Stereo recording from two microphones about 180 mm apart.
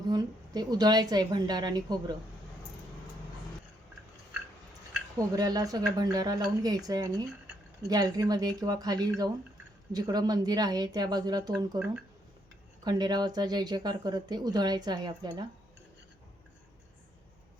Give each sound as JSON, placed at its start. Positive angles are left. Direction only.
{"t": 0.1, "sound": "speech", "side_deg": -20}
{"t": 5.1, "sound": "speech", "side_deg": -20}
{"t": 12.8, "sound": "speech", "side_deg": -25}